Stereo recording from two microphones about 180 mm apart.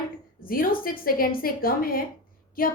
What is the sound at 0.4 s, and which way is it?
A woman's voice, 50° left (ahead or behind).